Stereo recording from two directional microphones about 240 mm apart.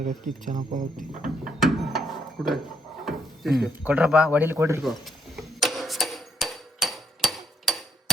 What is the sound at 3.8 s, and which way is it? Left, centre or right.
A man's voice, centre.